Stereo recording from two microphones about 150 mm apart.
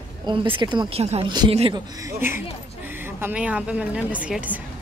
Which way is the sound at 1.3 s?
30° right (ahead or behind).